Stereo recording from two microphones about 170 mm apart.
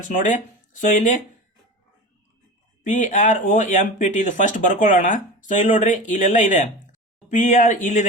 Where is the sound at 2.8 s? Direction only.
50° left (ahead or behind).